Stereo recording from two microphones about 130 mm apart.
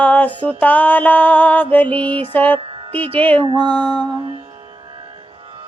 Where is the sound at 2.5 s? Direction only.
40° right (ahead or behind).